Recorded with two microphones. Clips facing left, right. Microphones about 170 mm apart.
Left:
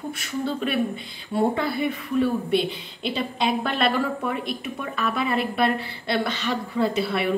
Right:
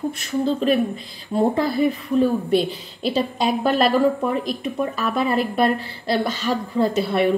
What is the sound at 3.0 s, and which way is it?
Speech, 35° right (ahead or behind).